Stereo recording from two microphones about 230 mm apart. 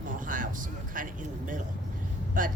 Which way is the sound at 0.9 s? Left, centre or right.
Right.